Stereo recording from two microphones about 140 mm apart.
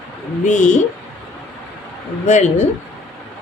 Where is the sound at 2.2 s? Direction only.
60° left (ahead or behind).